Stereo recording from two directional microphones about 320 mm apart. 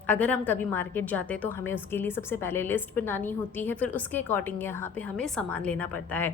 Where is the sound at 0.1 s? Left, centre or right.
Centre.